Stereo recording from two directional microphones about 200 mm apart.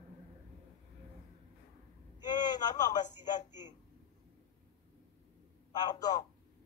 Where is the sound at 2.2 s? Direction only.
20° left (ahead or behind).